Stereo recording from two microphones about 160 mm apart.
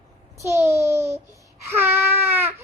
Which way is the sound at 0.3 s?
15° right (ahead or behind).